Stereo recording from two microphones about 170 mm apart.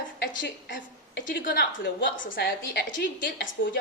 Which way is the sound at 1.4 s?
65° left (ahead or behind).